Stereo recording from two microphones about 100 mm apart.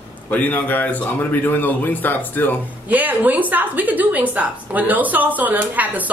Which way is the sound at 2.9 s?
15° right (ahead or behind).